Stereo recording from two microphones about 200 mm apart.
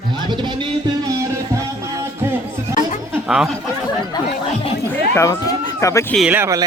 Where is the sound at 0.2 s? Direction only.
20° right (ahead or behind).